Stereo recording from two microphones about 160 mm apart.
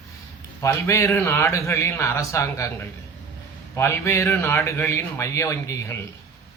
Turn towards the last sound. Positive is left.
turn(degrees=15)  # may be behind; listen again after turning